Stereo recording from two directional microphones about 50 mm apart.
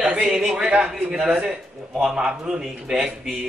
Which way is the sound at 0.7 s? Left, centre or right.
Right.